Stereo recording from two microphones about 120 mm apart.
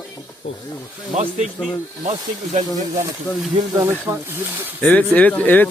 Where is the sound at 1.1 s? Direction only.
90° right.